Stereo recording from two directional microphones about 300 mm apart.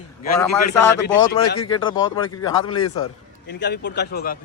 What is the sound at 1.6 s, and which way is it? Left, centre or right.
Speech, centre.